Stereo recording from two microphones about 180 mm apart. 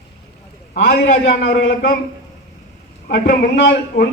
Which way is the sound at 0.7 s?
60° left (ahead or behind).